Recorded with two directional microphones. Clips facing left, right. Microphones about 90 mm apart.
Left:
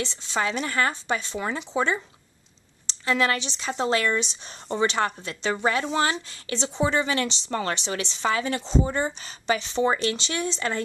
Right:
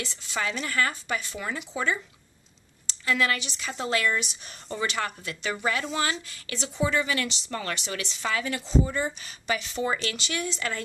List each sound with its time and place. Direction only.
0.0 s speech: 25° left (ahead or behind)